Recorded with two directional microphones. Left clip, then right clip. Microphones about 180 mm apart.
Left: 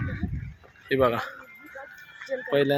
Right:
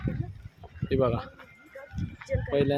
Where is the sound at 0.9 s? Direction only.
Centre (ahead or behind).